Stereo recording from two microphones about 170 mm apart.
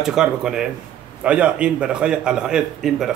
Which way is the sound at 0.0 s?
5° right (ahead or behind).